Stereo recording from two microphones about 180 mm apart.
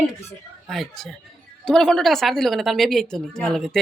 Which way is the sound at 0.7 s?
Centre (ahead or behind).